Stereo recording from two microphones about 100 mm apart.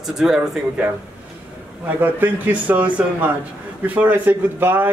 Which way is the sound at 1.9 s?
20° right (ahead or behind).